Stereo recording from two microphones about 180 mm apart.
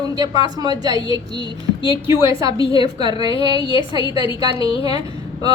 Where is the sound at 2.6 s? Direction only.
30° left (ahead or behind).